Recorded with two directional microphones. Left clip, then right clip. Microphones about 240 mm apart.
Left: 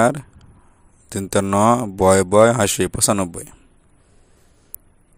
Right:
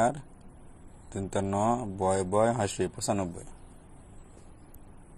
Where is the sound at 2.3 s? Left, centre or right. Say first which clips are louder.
Left 13 dB; left.